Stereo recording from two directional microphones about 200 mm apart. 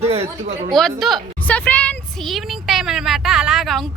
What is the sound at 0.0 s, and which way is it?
Speech, 30° right (ahead or behind).